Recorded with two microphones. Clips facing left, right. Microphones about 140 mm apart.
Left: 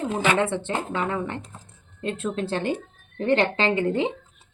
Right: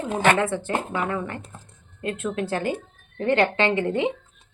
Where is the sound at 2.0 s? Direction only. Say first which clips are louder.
Even; 30° left (ahead or behind).